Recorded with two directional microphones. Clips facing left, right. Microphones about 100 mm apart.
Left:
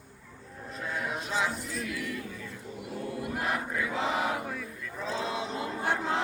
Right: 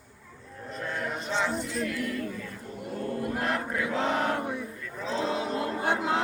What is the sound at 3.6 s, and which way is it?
Crowd, 20° right (ahead or behind).